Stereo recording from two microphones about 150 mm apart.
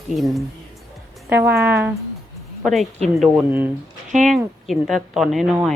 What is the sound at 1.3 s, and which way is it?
Speech, 15° right (ahead or behind).